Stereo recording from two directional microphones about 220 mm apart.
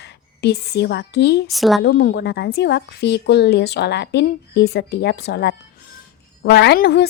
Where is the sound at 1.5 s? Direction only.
Centre (ahead or behind).